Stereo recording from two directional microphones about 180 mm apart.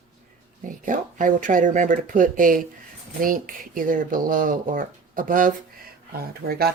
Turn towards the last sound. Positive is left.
turn(degrees=-60)  # may be behind; listen again after turning